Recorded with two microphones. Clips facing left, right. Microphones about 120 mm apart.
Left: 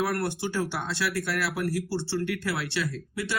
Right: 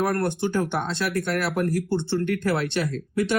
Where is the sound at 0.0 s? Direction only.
50° right (ahead or behind).